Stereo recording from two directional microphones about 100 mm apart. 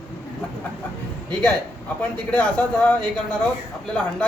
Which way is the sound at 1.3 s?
10° left (ahead or behind).